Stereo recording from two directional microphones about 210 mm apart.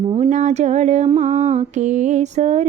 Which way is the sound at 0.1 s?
30° right (ahead or behind).